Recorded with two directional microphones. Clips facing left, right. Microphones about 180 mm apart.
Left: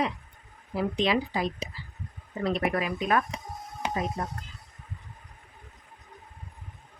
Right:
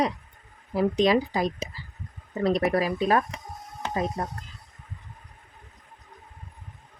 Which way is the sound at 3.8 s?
10° left (ahead or behind).